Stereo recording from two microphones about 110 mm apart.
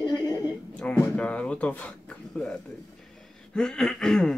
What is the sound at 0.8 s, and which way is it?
Speech, 10° left (ahead or behind).